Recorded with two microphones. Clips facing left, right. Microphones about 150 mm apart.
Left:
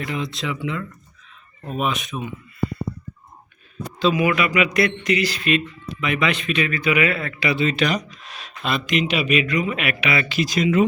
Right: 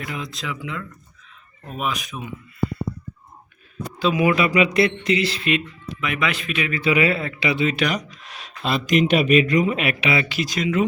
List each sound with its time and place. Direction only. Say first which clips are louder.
0.0 s speech: left 4 dB; centre (ahead or behind)
4.1 s speech: right 3 dB; 25° right (ahead or behind)
6.0 s speech: left 3 dB; centre (ahead or behind)
6.7 s speech: right 3 dB; 25° right (ahead or behind)
9.0 s speech: right 6 dB; 45° right (ahead or behind)
9.6 s speech: right 2 dB; 30° right (ahead or behind)
10.4 s speech: left 6 dB; centre (ahead or behind)